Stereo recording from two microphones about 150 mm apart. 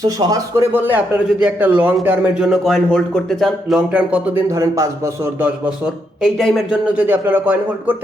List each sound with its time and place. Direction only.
0.0 s speech: 25° right (ahead or behind)
0.7 s speech: 15° right (ahead or behind)
5.6 s speech: 5° right (ahead or behind)